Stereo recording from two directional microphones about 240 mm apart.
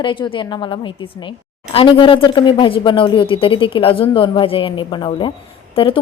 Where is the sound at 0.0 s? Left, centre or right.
Centre.